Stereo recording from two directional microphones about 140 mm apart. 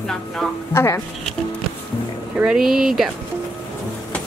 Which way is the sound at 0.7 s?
20° left (ahead or behind).